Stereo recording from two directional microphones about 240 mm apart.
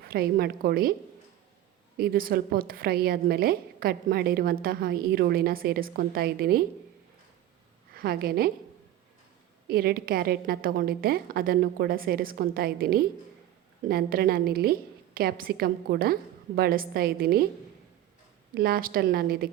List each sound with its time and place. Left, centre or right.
0.0 s a woman's voice: right
2.0 s a woman's voice: right
7.9 s a woman's voice: right
9.6 s a woman's voice: right
18.5 s a woman's voice: right